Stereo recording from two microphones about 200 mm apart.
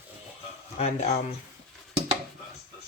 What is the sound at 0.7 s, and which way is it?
Speech, 30° left (ahead or behind).